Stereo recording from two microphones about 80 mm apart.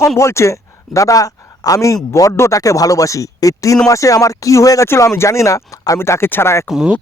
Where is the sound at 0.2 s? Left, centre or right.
Left.